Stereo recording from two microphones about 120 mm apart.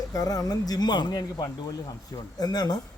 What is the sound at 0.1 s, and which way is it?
A man's voice, 30° left (ahead or behind).